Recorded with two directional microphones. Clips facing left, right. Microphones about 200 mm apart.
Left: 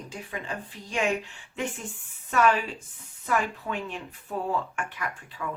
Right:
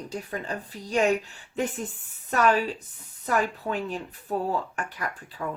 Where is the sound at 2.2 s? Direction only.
40° right (ahead or behind).